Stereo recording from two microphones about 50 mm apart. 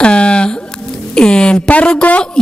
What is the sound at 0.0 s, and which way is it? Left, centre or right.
Speech, centre.